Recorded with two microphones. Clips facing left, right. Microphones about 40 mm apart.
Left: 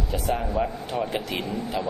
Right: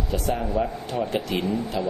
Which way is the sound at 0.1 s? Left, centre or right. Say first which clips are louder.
Right 1 dB; centre.